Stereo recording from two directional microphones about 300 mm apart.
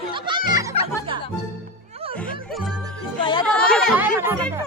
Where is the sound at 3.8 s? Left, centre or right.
Centre.